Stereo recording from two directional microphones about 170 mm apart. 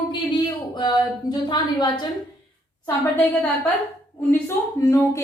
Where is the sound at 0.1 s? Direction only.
25° left (ahead or behind).